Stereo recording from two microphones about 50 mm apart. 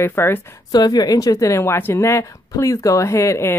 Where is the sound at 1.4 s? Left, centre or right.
Left.